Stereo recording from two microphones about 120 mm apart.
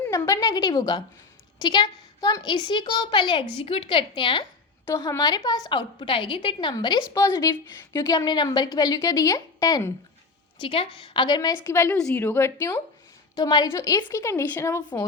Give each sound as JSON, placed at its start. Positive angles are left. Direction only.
{"t": 0.1, "sound": "a woman's voice", "side_deg": 30}
{"t": 4.9, "sound": "a woman's voice", "side_deg": 35}
{"t": 7.1, "sound": "a woman's voice", "side_deg": 25}
{"t": 10.6, "sound": "a woman's voice", "side_deg": 50}
{"t": 11.6, "sound": "a woman's voice", "side_deg": 20}
{"t": 11.9, "sound": "a woman's voice", "side_deg": 5}
{"t": 12.2, "sound": "a woman's voice", "side_deg": 20}
{"t": 13.3, "sound": "a woman's voice", "side_deg": 35}